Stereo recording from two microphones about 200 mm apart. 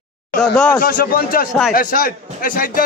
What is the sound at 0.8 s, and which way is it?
A man's voice, 45° left (ahead or behind).